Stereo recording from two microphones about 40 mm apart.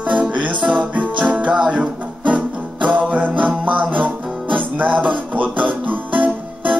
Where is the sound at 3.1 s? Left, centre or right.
Right.